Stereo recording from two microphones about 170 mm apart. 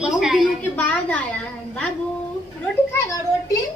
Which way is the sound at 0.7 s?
10° left (ahead or behind).